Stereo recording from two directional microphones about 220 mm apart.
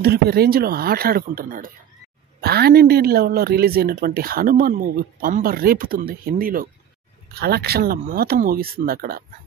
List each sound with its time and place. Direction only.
0.0 s a woman's voice: 45° right (ahead or behind)